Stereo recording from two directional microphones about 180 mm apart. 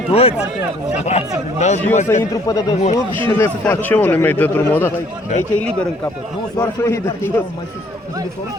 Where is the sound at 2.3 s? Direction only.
20° left (ahead or behind).